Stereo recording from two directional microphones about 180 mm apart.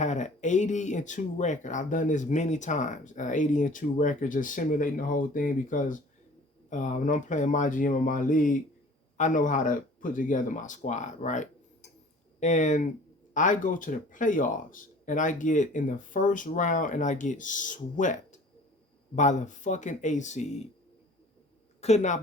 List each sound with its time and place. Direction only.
0.0 s speech: 40° left (ahead or behind)
21.8 s speech: 35° left (ahead or behind)